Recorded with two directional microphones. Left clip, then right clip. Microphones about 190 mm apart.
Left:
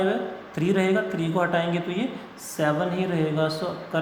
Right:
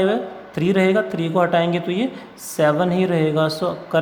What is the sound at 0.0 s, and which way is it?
Speech, 30° right (ahead or behind).